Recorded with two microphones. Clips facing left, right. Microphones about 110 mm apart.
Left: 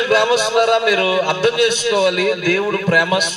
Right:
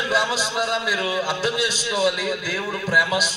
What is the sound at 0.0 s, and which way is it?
A man's voice, 65° left (ahead or behind).